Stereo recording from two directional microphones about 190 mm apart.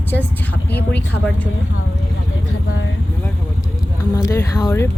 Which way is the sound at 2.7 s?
80° left.